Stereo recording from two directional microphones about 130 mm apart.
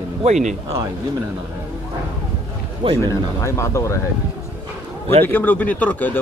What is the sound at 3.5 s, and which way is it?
Speech, 20° left (ahead or behind).